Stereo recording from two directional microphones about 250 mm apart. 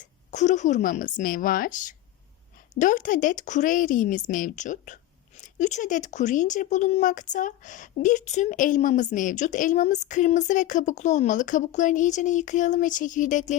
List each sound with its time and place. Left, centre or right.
0.0 s speech: left